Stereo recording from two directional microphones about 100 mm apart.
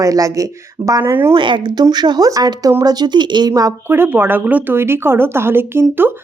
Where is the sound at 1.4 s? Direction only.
50° right (ahead or behind).